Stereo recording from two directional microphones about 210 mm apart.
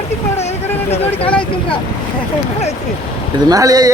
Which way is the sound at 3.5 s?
15° right (ahead or behind).